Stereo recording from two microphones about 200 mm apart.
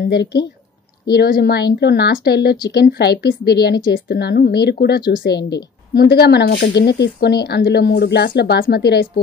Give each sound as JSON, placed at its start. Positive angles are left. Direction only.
{"t": 0.1, "sound": "a woman's voice", "side_deg": 55}